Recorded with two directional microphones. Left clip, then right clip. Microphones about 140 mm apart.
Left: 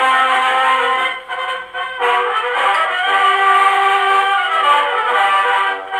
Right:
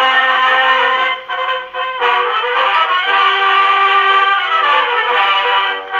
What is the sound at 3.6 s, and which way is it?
Music, 20° left (ahead or behind).